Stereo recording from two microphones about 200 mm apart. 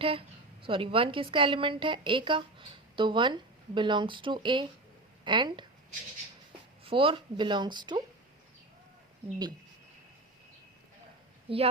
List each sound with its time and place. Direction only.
0.0 s a woman's voice: 25° right (ahead or behind)
6.8 s a woman's voice: 25° right (ahead or behind)
11.4 s a woman's voice: 30° right (ahead or behind)